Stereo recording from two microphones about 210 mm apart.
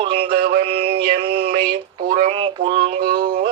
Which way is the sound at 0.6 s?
25° right (ahead or behind).